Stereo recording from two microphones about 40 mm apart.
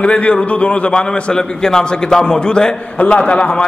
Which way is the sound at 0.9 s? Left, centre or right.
Centre.